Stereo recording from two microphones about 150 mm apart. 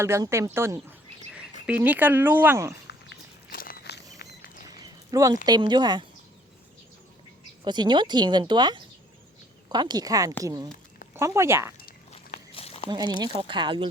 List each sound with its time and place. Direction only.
0.0 s speech: 20° right (ahead or behind)
3.5 s walk: 80° left
4.2 s a sound: 90° left
5.1 s speech: 25° right (ahead or behind)
7.6 s speech: 30° right (ahead or behind)
12.1 s a sound: 45° left (ahead or behind)
13.1 s speech: 30° right (ahead or behind)